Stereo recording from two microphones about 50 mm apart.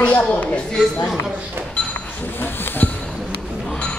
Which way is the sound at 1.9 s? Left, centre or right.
Left.